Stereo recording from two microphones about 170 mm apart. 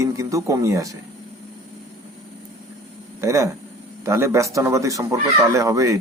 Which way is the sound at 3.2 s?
20° right (ahead or behind).